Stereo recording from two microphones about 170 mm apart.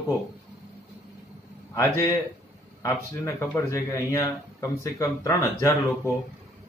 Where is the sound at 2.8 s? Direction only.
15° left (ahead or behind).